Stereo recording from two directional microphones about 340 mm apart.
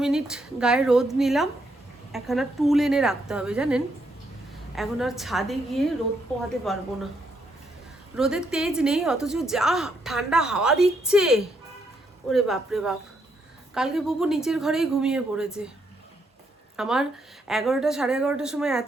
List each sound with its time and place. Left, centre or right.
0.0 s a woman's voice: centre
8.1 s a woman's voice: centre
16.7 s a woman's voice: centre